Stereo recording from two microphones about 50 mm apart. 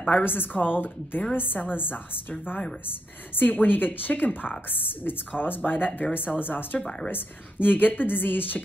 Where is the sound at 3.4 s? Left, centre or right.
Left.